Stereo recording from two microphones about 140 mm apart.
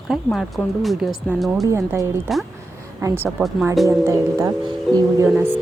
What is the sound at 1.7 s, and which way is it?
Speech, 20° right (ahead or behind).